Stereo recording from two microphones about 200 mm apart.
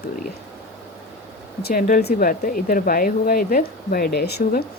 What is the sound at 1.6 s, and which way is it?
Speech, 45° left (ahead or behind).